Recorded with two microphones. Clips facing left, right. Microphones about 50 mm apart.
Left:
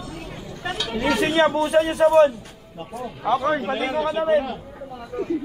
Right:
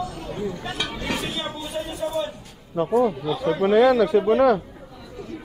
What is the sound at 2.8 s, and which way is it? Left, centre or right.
Speech, right.